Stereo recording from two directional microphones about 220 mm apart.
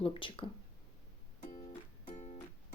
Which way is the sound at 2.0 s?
30° left (ahead or behind).